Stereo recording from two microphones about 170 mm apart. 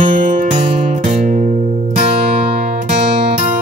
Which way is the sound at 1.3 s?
50° right (ahead or behind).